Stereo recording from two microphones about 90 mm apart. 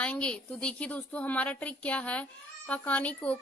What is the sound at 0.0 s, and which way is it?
A woman's voice, 15° left (ahead or behind).